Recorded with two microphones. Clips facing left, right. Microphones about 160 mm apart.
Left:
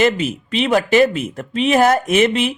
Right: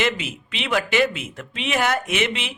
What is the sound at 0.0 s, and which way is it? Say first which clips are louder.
Speech: left 8 dB; 40° left (ahead or behind).